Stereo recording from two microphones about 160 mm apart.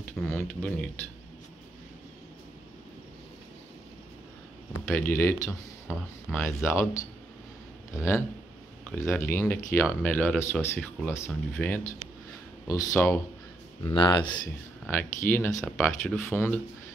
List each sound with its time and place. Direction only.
0.2 s speech: 10° left (ahead or behind)
4.8 s speech: 15° left (ahead or behind)
12.6 s speech: 20° left (ahead or behind)
13.9 s speech: 25° left (ahead or behind)
14.9 s speech: 10° left (ahead or behind)